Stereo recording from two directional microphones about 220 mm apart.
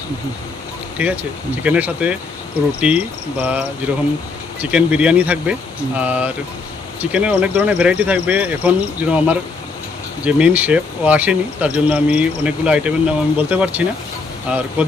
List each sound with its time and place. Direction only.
0.9 s speech: 5° right (ahead or behind)